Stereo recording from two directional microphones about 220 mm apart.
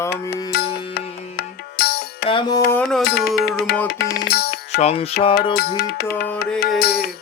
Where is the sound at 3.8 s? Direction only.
45° left (ahead or behind).